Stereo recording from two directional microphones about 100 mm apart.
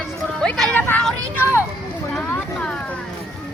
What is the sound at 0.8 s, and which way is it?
Speech, 15° left (ahead or behind).